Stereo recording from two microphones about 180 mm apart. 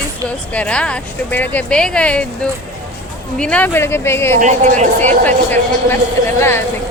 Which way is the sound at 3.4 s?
5° left (ahead or behind).